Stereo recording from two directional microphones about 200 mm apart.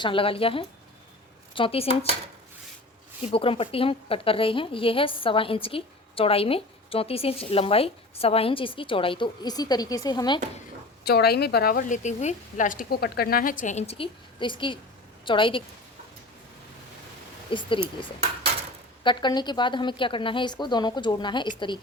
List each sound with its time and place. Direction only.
0.0 s a woman's voice: 25° left (ahead or behind)
3.2 s a woman's voice: 30° left (ahead or behind)
11.0 s a woman's voice: 50° left (ahead or behind); by 15.6 s 25° left (ahead or behind)
17.5 s a woman's voice: 25° left (ahead or behind)
19.0 s a woman's voice: 20° left (ahead or behind)